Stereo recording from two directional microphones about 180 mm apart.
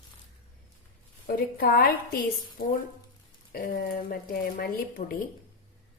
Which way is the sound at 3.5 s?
55° left (ahead or behind).